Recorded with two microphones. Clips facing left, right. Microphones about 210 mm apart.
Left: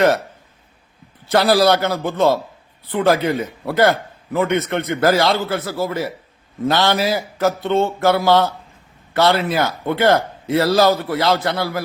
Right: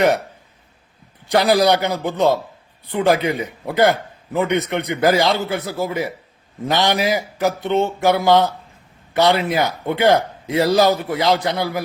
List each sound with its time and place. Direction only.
1.2 s a man's voice: 15° right (ahead or behind)